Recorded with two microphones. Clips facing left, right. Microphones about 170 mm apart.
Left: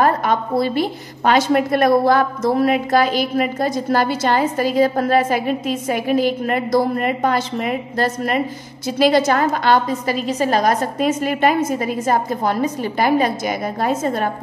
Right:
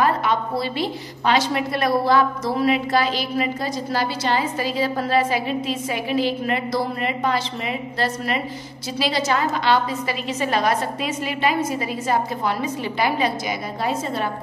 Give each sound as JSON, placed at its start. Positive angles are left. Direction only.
{"t": 0.0, "sound": "a woman's voice", "side_deg": 45}